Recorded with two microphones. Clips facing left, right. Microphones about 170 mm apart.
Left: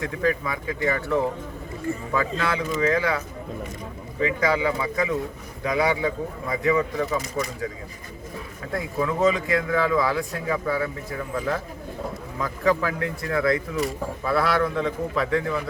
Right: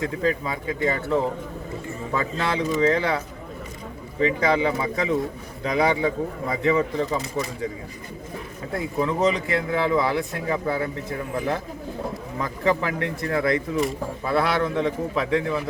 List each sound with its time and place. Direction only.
0.0 s a man's voice: 25° right (ahead or behind)
8.7 s a man's voice: 25° right (ahead or behind)